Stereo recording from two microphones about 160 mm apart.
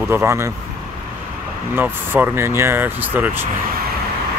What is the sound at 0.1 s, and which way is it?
Speech, 15° right (ahead or behind).